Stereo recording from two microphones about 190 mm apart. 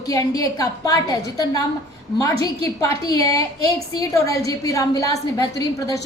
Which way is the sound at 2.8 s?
20° left (ahead or behind).